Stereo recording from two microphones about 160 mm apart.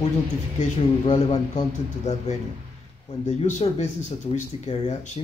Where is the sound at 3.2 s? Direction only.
45° left (ahead or behind).